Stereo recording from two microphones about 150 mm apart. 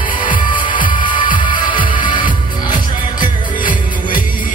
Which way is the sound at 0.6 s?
30° left (ahead or behind).